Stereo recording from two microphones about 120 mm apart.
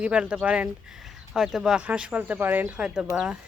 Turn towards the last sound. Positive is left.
turn(degrees=-5)  # may be behind; listen again after turning